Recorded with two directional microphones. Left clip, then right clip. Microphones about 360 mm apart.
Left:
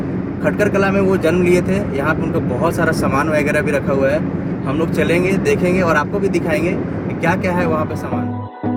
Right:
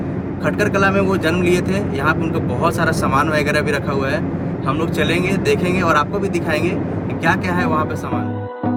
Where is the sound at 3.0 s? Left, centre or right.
Right.